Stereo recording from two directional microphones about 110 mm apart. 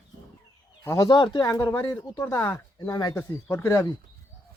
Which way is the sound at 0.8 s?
30° left (ahead or behind).